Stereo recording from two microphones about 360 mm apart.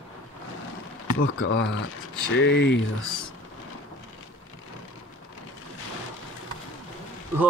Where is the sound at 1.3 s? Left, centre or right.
Left.